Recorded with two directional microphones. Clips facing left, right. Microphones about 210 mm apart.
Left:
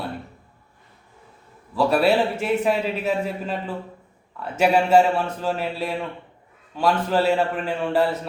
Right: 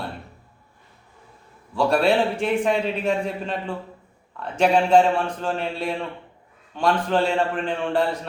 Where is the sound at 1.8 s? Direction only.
5° left (ahead or behind).